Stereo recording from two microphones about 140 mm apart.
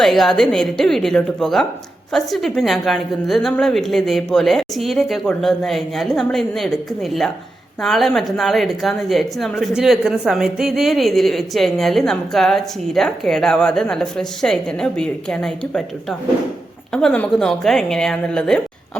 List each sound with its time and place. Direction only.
0.0 s a woman's voice: 5° left (ahead or behind)